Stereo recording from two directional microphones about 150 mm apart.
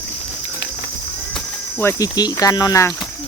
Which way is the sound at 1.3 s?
15° left (ahead or behind).